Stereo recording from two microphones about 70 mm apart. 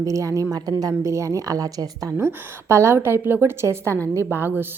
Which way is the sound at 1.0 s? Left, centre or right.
Right.